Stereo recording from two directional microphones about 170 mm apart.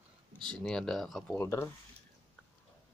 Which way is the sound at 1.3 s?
15° left (ahead or behind).